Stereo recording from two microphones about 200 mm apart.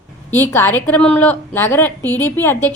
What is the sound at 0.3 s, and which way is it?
A woman's voice, 10° left (ahead or behind).